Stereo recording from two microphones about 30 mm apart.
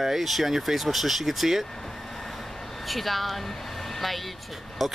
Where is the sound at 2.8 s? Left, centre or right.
Centre.